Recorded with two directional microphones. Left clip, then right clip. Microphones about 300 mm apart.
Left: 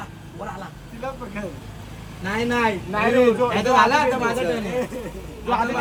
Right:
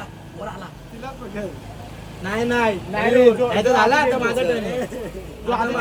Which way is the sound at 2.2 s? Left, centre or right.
Centre.